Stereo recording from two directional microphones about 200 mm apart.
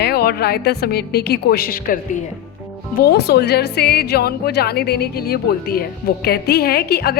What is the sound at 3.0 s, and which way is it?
A woman's voice, 55° left (ahead or behind).